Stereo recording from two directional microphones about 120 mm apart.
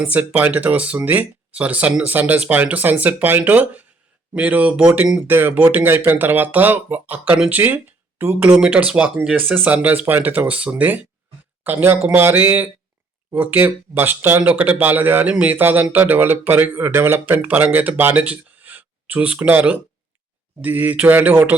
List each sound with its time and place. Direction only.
0.0 s speech: 15° right (ahead or behind)